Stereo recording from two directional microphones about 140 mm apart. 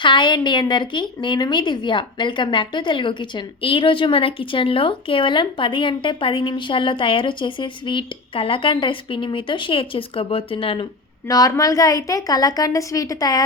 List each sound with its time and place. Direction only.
0.0 s a woman's voice: 35° left (ahead or behind)
11.3 s a woman's voice: 25° left (ahead or behind)